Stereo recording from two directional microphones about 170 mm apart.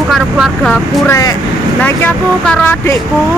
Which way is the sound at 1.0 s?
15° left (ahead or behind).